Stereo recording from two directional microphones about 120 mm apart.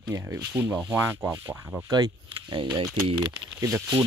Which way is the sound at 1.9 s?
40° right (ahead or behind).